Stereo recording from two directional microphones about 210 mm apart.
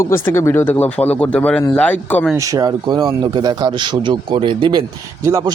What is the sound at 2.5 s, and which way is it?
Speech, 20° right (ahead or behind).